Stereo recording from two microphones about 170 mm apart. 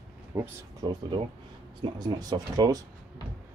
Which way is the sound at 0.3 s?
15° right (ahead or behind).